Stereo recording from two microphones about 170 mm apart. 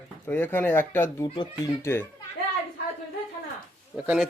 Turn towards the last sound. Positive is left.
turn(degrees=-5)  # may be behind; listen again after turning